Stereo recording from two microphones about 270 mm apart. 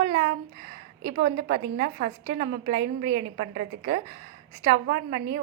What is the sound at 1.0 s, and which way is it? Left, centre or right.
A woman's voice, right.